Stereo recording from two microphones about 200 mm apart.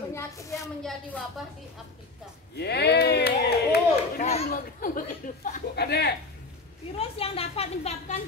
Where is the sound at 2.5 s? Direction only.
55° left (ahead or behind).